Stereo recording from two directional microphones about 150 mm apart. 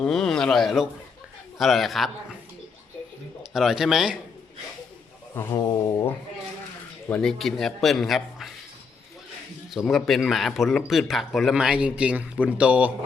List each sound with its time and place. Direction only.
0.0 s a man's voice: 5° left (ahead or behind)
3.5 s a man's voice: 5° right (ahead or behind)
5.3 s speech: 20° left (ahead or behind)
7.1 s a man's voice: 5° left (ahead or behind)
9.7 s a man's voice: centre (ahead or behind)